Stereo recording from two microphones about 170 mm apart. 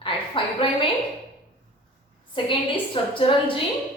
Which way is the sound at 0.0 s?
30° left (ahead or behind).